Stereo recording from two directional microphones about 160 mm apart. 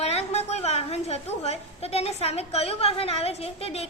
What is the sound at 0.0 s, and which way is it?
A woman's voice, 40° left (ahead or behind).